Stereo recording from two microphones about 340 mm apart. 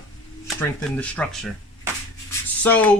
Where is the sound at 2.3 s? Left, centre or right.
Centre.